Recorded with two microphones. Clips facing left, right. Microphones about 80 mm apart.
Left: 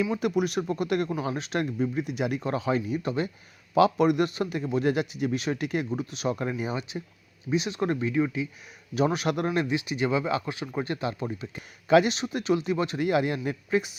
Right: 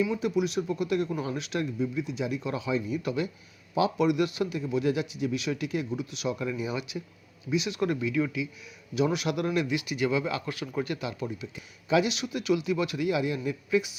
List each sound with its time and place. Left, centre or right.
0.2 s a man's voice: left
2.4 s a man's voice: left
2.7 s speech: left
3.0 s speech: left
3.8 s a man's voice: left
6.7 s speech: left
11.3 s a man's voice: left
12.1 s speech: left
13.0 s a man's voice: left